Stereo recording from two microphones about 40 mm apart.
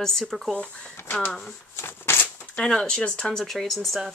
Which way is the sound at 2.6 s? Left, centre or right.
Centre.